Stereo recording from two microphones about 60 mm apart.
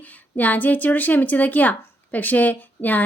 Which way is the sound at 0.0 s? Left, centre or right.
Left.